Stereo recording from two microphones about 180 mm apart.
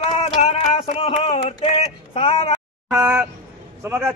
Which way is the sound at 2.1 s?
30° left (ahead or behind).